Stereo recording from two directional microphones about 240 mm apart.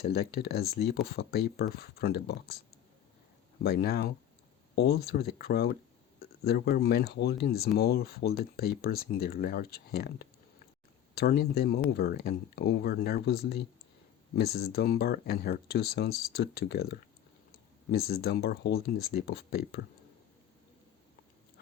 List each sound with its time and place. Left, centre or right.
0.0 s speech: left
3.6 s speech: left